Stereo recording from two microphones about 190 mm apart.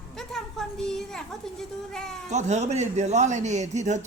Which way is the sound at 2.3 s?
35° right (ahead or behind).